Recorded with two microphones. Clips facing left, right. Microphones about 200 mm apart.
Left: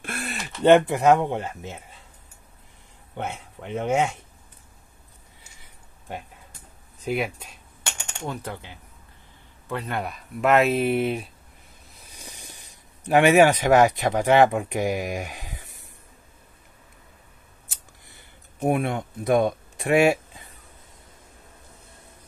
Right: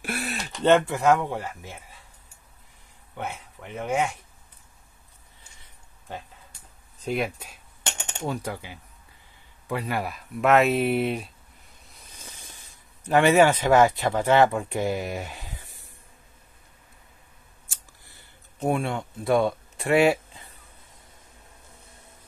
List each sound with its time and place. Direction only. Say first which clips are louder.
0.0 s a sound: right 2 dB; 5° right (ahead or behind)
0.6 s speech: left 4 dB; 15° left (ahead or behind)
3.2 s speech: left 2 dB; 25° left (ahead or behind)
7.1 s speech: left 1 dB; centre (ahead or behind)
12.2 s speech: left 3 dB; 15° left (ahead or behind)
17.6 s a sound: left 3 dB; 20° left (ahead or behind)